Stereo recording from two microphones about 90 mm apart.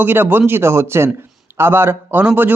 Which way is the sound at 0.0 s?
20° right (ahead or behind).